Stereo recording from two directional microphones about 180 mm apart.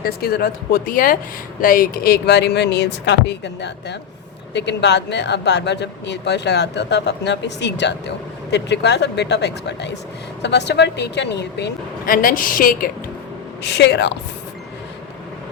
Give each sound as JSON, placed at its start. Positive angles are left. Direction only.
{"t": 0.0, "sound": "speech", "side_deg": 60}
{"t": 13.6, "sound": "speech", "side_deg": 65}